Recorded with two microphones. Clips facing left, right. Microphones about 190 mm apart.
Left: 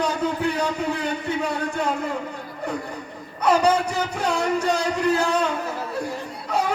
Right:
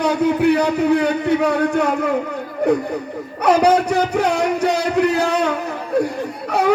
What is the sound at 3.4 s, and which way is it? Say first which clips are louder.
Speech: right 5 dB; 65° right (ahead or behind).